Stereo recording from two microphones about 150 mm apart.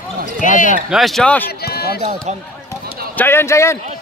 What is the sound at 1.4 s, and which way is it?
Speech, 90° left.